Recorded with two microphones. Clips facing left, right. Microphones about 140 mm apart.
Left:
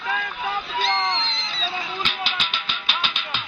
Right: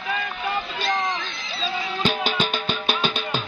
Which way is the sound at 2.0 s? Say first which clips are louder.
Right 6 dB; 45° right (ahead or behind).